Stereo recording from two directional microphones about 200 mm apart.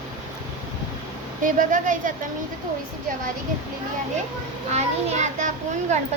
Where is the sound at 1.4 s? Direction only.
40° right (ahead or behind).